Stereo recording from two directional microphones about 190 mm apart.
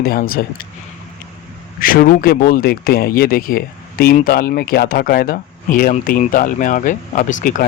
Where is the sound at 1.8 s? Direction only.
50° left (ahead or behind).